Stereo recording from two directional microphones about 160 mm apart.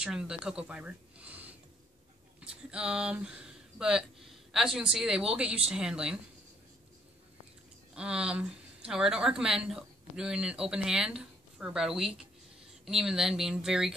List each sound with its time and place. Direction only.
0.0 s speech: 5° right (ahead or behind)
7.9 s speech: 5° right (ahead or behind)